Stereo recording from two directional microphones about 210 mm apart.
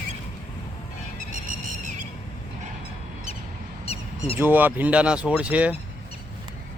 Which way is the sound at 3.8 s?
30° left (ahead or behind).